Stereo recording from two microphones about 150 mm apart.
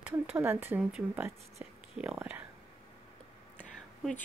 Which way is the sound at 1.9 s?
5° right (ahead or behind).